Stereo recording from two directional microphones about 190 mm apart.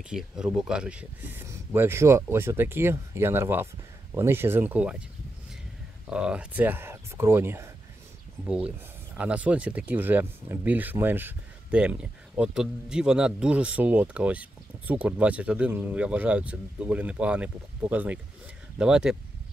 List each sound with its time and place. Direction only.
0.1 s speech: 5° right (ahead or behind)
6.0 s speech: 5° right (ahead or behind)